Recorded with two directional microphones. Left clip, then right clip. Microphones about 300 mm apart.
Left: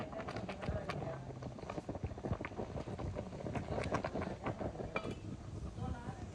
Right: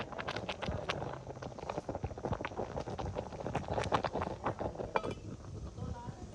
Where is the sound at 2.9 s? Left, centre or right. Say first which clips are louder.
Right 5 dB; centre.